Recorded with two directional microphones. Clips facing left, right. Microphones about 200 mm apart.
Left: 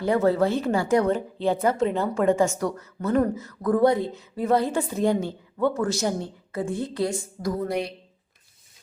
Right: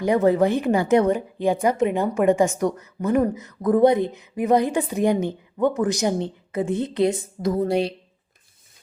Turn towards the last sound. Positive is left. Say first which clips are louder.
# right 5 dB
turn(degrees=-30)  # may be behind; listen again after turning